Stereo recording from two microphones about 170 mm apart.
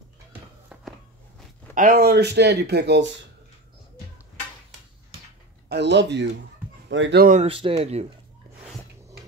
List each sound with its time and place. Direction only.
1.8 s speech: 60° right (ahead or behind); by 3.1 s 80° right
5.7 s speech: 90° right
7.4 s speech: 30° right (ahead or behind)